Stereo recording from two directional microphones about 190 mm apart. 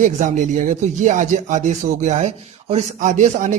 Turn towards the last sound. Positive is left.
turn(degrees=-40)  # may be behind; listen again after turning